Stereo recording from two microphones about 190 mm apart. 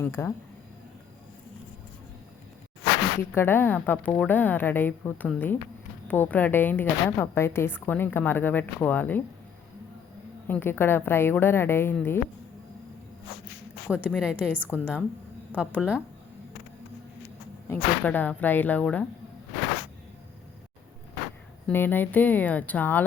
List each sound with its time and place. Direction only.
0.0 s a woman's voice: 15° left (ahead or behind)
3.2 s a woman's voice: 10° left (ahead or behind)
10.4 s a woman's voice: 10° left (ahead or behind)
14.1 s a woman's voice: 5° right (ahead or behind)
17.7 s a woman's voice: 10° left (ahead or behind)
21.7 s a woman's voice: 10° left (ahead or behind)